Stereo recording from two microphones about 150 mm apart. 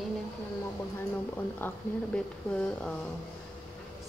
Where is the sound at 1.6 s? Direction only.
10° left (ahead or behind).